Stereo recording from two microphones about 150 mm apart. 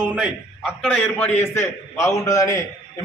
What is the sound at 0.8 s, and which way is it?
Speech, 5° left (ahead or behind).